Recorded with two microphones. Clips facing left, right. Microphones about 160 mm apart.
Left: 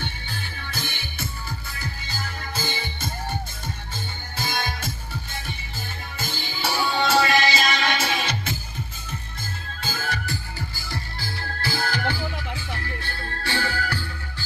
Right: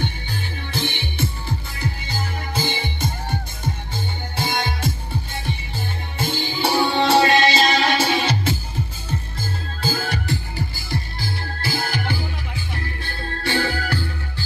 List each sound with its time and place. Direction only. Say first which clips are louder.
0.7 s music: right 10 dB; 25° right (ahead or behind)
4.4 s music: right 4 dB; 25° right (ahead or behind)
6.1 s music: right 9 dB; 30° right (ahead or behind)
11.6 s music: even; 15° right (ahead or behind)